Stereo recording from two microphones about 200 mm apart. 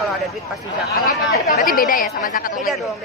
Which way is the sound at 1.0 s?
45° left (ahead or behind).